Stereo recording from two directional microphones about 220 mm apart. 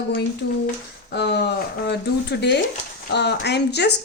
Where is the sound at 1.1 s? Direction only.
50° left (ahead or behind).